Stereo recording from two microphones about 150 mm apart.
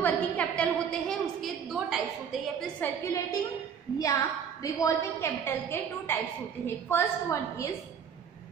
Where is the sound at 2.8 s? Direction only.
10° left (ahead or behind).